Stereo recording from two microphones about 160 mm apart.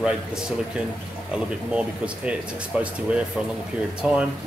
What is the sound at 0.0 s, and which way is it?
A man's voice, 5° right (ahead or behind).